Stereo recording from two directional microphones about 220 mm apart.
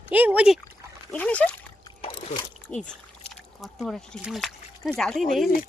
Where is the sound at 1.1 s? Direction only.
5° left (ahead or behind).